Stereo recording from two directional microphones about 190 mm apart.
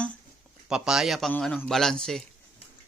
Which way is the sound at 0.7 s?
5° right (ahead or behind).